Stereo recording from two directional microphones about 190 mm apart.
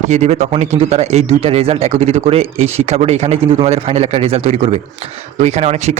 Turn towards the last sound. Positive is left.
turn(degrees=-35)  # may be behind; listen again after turning